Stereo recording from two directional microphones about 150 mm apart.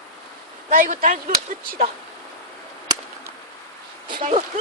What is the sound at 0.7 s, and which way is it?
Speech, 65° right (ahead or behind).